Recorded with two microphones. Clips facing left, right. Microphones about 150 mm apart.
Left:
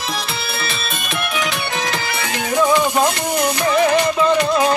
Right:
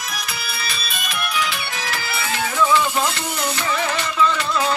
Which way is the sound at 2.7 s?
15° left (ahead or behind).